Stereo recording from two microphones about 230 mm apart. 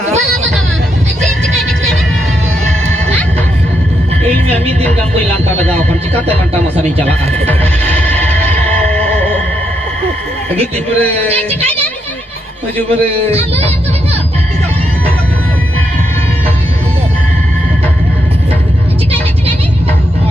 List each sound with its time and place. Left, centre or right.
5.6 s a sound: centre
8.0 s music: centre
11.0 s a man's voice: centre
13.3 s speech: right